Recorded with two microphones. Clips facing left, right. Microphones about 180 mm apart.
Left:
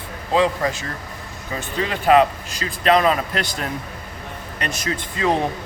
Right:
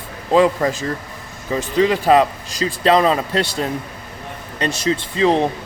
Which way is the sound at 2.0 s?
35° right (ahead or behind).